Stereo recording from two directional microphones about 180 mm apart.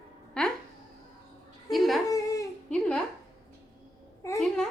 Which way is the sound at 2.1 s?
20° left (ahead or behind).